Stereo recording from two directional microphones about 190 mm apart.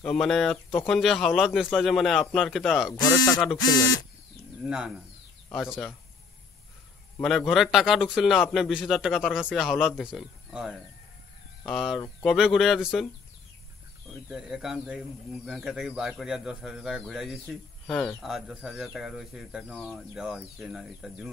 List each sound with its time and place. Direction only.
0.0 s speech: centre (ahead or behind)
2.9 s speech: 20° left (ahead or behind)
4.6 s speech: 5° right (ahead or behind)
7.2 s speech: centre (ahead or behind)
14.3 s speech: 5° right (ahead or behind)